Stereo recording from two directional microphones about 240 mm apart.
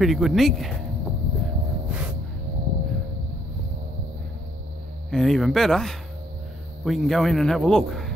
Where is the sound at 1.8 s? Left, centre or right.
Centre.